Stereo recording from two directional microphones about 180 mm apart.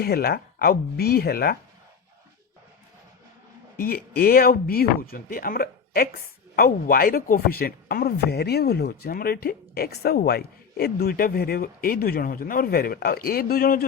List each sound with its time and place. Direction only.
0.0 s speech: 60° left (ahead or behind)
3.8 s speech: 55° left (ahead or behind)